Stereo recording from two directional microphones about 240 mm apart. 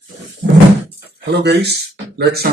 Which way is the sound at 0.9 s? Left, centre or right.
Right.